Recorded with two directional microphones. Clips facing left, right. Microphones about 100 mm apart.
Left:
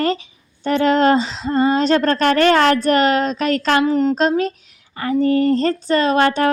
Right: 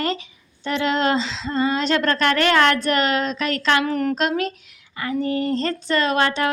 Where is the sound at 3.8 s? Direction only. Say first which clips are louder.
Left 6 dB; 20° left (ahead or behind).